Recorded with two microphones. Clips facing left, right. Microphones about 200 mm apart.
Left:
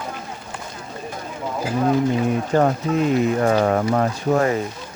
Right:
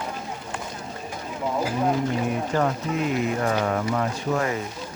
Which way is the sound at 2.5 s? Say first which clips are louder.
Left 6 dB; 40° left (ahead or behind).